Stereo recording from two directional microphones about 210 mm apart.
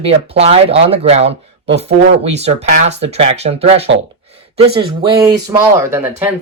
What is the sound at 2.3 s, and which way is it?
Speech, 30° right (ahead or behind).